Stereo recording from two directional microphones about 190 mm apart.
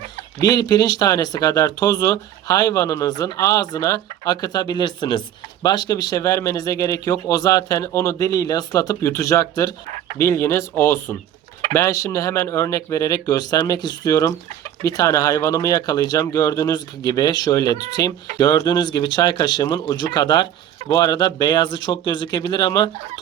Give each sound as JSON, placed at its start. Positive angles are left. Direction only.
{"t": 0.4, "sound": "speech", "side_deg": 20}